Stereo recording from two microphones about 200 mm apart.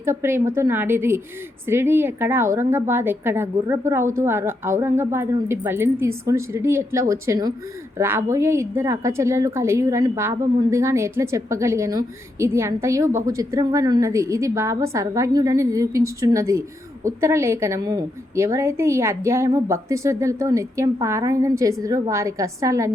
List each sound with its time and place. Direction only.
0.0 s a woman's voice: 15° right (ahead or behind)